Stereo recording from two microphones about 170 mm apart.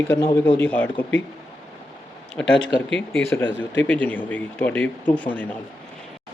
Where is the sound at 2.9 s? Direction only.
5° left (ahead or behind).